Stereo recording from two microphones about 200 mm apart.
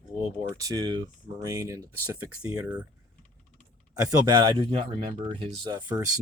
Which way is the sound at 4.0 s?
15° right (ahead or behind).